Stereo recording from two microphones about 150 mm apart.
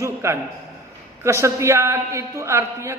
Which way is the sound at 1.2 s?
20° right (ahead or behind).